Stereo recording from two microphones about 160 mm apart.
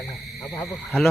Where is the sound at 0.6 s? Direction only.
Centre (ahead or behind).